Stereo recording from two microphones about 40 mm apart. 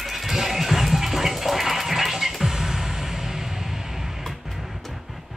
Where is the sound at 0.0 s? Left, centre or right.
Centre.